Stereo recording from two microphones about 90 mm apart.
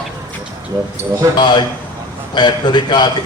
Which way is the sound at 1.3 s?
55° left (ahead or behind).